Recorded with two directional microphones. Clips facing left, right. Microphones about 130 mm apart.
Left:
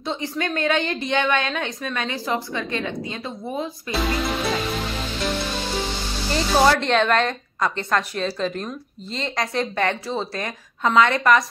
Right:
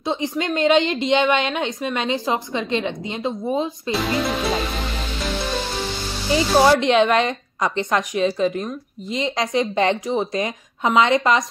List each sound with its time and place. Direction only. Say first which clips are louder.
0.0 s a woman's voice: right 3 dB; 15° right (ahead or behind)
6.3 s speech: right 3 dB; 10° right (ahead or behind)